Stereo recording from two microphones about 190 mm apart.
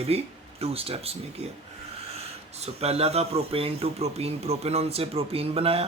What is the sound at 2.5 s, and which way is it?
A man's voice, 35° right (ahead or behind).